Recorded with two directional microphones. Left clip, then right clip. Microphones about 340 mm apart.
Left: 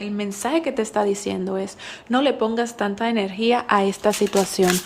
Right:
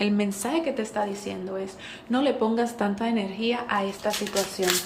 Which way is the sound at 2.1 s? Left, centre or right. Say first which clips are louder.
Left 4 dB; centre.